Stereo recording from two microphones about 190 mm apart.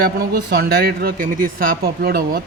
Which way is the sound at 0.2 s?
55° right (ahead or behind).